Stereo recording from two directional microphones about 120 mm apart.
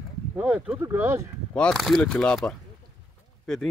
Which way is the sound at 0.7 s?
20° right (ahead or behind).